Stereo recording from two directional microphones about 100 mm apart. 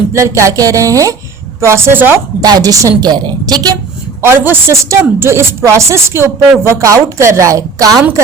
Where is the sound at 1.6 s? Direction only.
25° right (ahead or behind).